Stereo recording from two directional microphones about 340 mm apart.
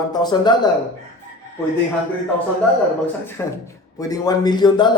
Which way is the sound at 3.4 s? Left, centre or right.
Centre.